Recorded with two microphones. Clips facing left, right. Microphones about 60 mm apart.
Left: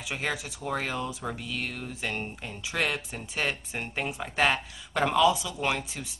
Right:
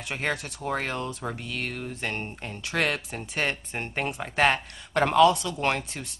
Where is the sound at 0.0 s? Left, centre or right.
Centre.